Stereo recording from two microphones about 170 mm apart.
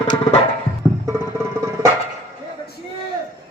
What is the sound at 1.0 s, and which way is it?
Music, 20° right (ahead or behind).